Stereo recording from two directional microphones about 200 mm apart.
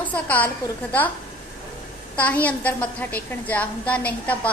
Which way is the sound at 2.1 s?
5° left (ahead or behind).